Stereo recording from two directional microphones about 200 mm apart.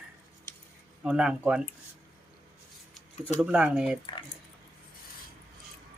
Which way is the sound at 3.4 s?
5° right (ahead or behind).